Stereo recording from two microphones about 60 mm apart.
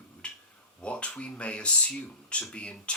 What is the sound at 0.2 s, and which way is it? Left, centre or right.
Finger snapping, centre.